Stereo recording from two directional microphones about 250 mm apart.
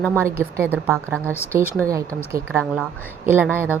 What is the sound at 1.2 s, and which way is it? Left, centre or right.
Speech, centre.